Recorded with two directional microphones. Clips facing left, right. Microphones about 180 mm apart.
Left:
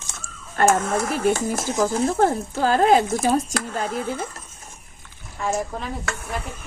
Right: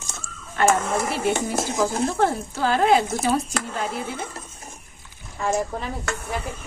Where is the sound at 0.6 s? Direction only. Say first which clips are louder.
Left 1 dB; 45° left (ahead or behind).